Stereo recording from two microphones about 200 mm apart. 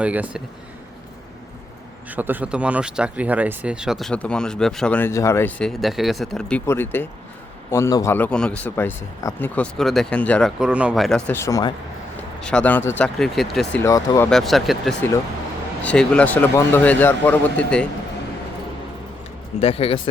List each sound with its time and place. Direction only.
0.0 s speech: 5° right (ahead or behind)
2.0 s speech: 10° right (ahead or behind); by 11.7 s 15° left (ahead or behind)
12.4 s speech: 5° left (ahead or behind)
13.8 s speech: 15° left (ahead or behind)
14.3 s speech: centre (ahead or behind)
19.5 s speech: 30° left (ahead or behind)